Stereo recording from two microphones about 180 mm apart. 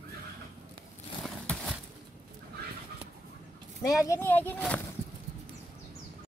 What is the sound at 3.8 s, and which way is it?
Speech, 20° left (ahead or behind).